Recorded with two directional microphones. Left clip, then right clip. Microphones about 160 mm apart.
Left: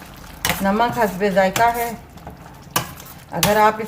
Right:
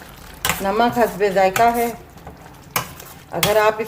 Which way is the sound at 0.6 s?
45° right (ahead or behind).